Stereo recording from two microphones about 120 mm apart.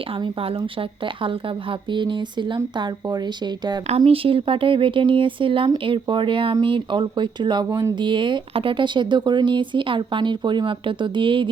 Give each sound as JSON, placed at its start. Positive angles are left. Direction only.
{"t": 0.1, "sound": "speech", "side_deg": -50}
{"t": 3.8, "sound": "speech", "side_deg": -55}
{"t": 7.7, "sound": "speech", "side_deg": -25}
{"t": 7.9, "sound": "speech", "side_deg": -40}